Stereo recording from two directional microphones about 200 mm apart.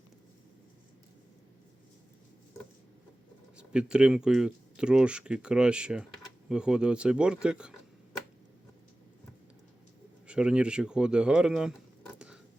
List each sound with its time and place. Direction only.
3.6 s speech: 5° right (ahead or behind)
10.2 s speech: 5° right (ahead or behind)